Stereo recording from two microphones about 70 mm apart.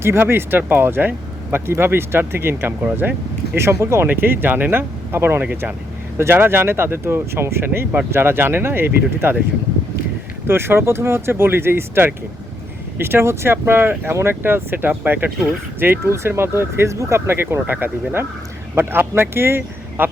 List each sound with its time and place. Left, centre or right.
0.0 s speech: right
10.4 s speech: right